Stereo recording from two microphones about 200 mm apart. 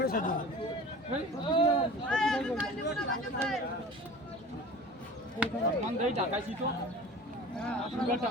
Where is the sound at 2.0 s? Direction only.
5° left (ahead or behind).